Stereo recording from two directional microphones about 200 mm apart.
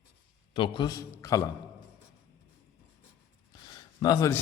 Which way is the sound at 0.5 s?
25° left (ahead or behind).